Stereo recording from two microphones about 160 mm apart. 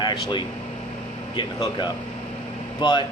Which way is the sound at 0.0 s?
30° left (ahead or behind).